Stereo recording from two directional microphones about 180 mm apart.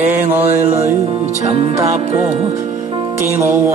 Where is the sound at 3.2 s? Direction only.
15° right (ahead or behind).